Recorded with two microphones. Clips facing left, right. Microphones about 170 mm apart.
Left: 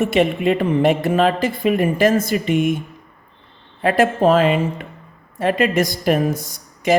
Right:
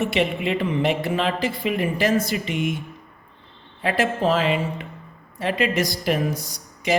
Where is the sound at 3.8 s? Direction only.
50° left (ahead or behind).